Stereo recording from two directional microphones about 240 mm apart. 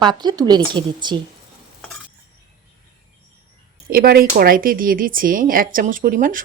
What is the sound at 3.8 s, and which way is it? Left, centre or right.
Speech, right.